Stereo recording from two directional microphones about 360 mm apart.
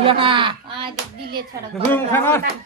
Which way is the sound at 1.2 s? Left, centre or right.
Right.